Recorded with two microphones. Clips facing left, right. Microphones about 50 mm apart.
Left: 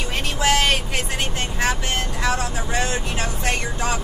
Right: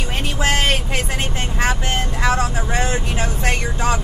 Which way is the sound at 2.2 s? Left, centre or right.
Right.